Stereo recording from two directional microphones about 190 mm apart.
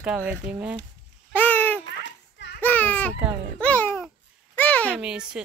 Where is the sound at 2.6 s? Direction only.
10° left (ahead or behind).